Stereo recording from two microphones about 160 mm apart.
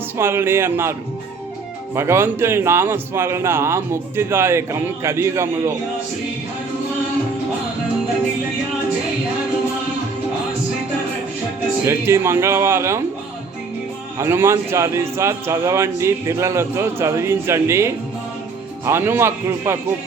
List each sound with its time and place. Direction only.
0.2 s a man's voice: 15° right (ahead or behind)
2.0 s a man's voice: 15° right (ahead or behind)
11.9 s a man's voice: 15° right (ahead or behind)
14.2 s a man's voice: 15° right (ahead or behind)